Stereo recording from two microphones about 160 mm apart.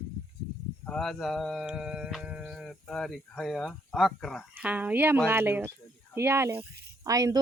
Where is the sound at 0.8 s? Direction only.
5° left (ahead or behind); by 7.4 s 20° right (ahead or behind).